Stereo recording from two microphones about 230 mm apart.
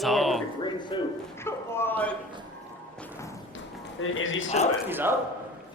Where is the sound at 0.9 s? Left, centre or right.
Left.